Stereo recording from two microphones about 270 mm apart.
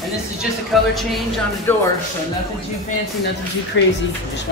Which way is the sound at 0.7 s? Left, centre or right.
Centre.